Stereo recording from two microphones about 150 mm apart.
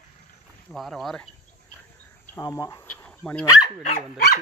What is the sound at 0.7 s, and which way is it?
Speech, centre (ahead or behind).